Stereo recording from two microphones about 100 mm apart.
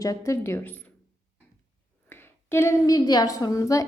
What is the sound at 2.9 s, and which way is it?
Speech, 40° left (ahead or behind).